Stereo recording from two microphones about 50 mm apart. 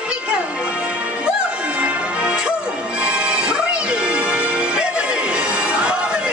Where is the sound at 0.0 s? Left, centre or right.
Right.